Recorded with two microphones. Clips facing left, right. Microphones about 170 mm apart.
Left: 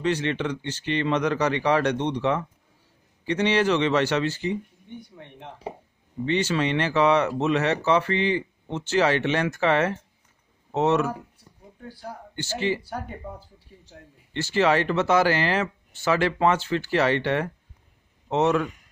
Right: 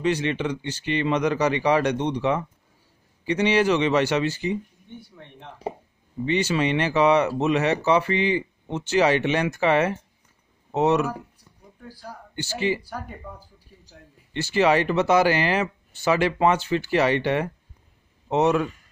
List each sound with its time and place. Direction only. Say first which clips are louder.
0.0 s speech: right 1 dB; 15° right (ahead or behind)
4.9 s speech: left 2 dB; 20° left (ahead or behind)
6.2 s speech: right 1 dB; 10° right (ahead or behind)
11.8 s a man's voice: left 2 dB; 25° left (ahead or behind)
12.4 s speech: right 1 dB; 10° right (ahead or behind)
14.3 s speech: right 1 dB; 15° right (ahead or behind)